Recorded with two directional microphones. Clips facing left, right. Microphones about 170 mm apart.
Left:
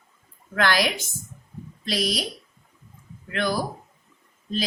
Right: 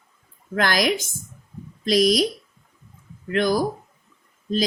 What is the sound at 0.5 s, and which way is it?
A woman's voice, 40° right (ahead or behind).